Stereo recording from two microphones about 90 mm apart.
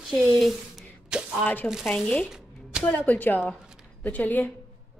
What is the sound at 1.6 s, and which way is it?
Speech, 5° right (ahead or behind).